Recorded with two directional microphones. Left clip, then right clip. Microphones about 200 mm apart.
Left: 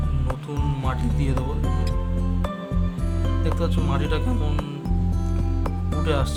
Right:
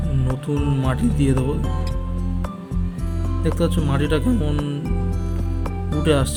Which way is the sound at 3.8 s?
15° right (ahead or behind).